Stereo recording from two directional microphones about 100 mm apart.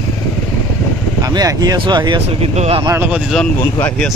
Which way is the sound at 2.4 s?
90° right.